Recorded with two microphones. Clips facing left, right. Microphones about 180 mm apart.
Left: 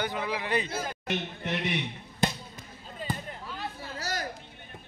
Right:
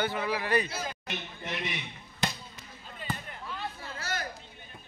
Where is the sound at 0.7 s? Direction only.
55° left (ahead or behind).